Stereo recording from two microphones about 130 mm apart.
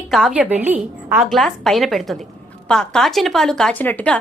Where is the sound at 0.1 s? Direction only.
5° right (ahead or behind).